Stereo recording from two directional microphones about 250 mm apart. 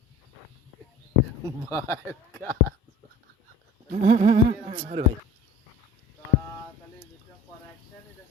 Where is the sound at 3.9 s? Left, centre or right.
Right.